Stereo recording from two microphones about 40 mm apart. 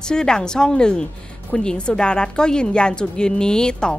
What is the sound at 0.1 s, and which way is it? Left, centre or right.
A woman's voice, centre.